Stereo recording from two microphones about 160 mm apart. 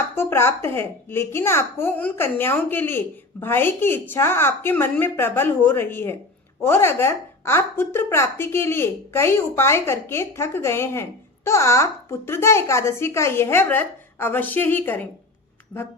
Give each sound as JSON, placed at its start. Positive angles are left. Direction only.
{"t": 0.2, "sound": "a woman's voice", "side_deg": 15}
{"t": 15.7, "sound": "speech", "side_deg": 0}